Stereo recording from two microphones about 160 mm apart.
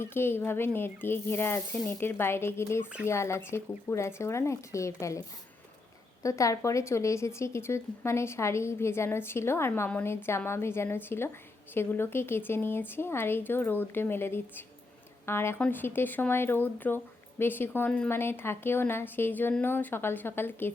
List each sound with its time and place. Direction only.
0.0 s speech: 15° left (ahead or behind)
6.2 s speech: 20° left (ahead or behind)